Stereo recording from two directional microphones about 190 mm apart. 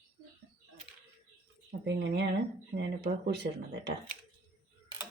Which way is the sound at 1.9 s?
65° right (ahead or behind).